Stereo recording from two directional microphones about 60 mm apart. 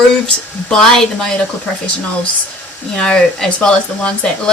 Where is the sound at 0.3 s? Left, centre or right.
Centre.